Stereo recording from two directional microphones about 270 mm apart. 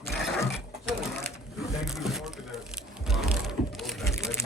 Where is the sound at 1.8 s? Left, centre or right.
Centre.